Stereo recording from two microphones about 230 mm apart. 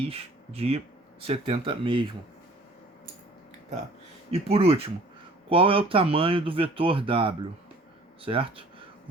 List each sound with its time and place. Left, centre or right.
0.1 s speech: right
4.3 s speech: right